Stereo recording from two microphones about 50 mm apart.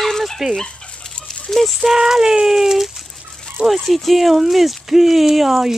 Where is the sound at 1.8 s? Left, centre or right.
Centre.